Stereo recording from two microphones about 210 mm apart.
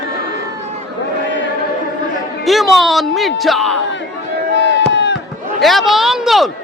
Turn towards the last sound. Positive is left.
turn(degrees=0)  # may be behind; listen again after turning